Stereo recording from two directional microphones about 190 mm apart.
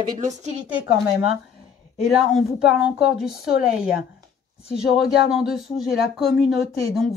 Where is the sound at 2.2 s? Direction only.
Centre (ahead or behind).